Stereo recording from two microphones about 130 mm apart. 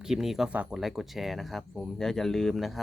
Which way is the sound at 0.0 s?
5° right (ahead or behind).